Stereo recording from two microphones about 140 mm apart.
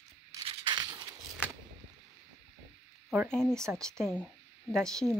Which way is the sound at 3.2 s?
5° left (ahead or behind).